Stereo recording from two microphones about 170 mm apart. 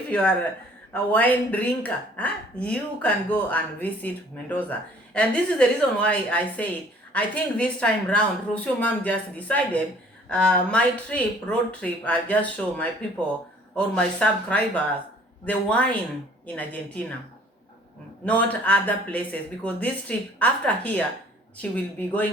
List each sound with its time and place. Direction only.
0.1 s speech: 10° left (ahead or behind)
18.3 s speech: 10° left (ahead or behind)